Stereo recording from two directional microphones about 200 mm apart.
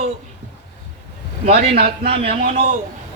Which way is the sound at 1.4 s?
30° right (ahead or behind).